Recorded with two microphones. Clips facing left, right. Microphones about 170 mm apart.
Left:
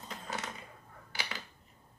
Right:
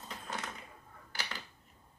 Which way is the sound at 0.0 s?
5° left (ahead or behind).